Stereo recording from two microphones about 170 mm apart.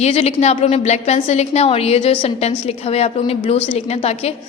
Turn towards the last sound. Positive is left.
turn(degrees=35)  # may be behind; listen again after turning